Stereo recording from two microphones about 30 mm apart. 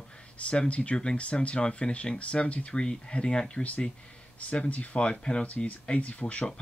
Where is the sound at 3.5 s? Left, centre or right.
Left.